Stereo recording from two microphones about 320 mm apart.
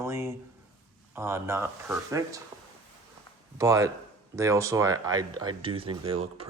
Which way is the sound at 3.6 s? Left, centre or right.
Centre.